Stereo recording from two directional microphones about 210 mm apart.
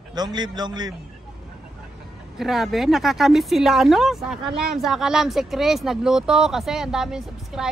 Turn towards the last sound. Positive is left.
turn(degrees=0)  # may be behind; listen again after turning